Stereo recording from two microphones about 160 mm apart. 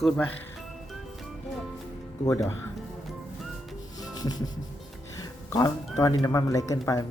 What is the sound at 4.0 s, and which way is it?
Rub, 25° left (ahead or behind).